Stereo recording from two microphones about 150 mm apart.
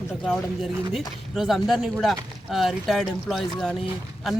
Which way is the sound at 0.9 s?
Centre (ahead or behind).